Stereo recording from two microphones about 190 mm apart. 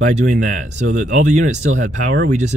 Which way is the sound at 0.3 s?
40° right (ahead or behind).